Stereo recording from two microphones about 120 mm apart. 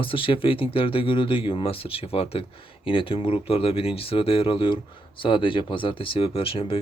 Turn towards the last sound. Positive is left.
turn(degrees=50)  # may be behind; listen again after turning